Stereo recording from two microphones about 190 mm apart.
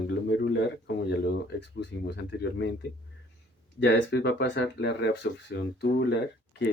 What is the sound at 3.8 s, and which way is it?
Speech, 65° left (ahead or behind).